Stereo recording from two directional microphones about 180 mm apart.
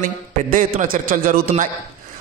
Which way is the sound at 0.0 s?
50° right (ahead or behind).